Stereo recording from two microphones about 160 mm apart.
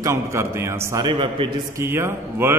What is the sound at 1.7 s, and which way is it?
Speech, 15° right (ahead or behind).